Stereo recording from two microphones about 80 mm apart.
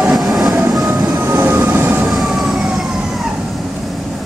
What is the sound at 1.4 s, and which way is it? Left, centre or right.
Train, right.